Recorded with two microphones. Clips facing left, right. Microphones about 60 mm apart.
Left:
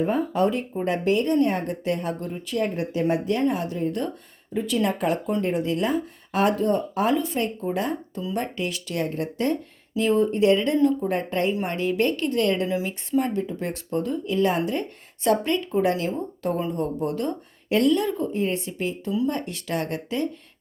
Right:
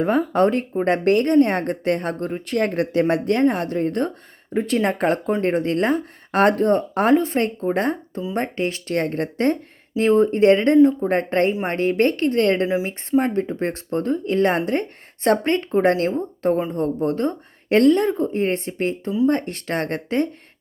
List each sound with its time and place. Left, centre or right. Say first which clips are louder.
0.0 s a woman's voice: right 4 dB; right